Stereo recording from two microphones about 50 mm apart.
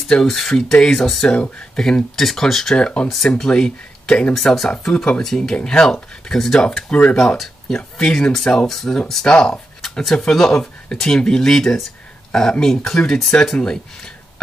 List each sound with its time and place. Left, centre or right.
0.1 s speech: centre
1.2 s speech: centre
2.1 s speech: centre
2.8 s speech: left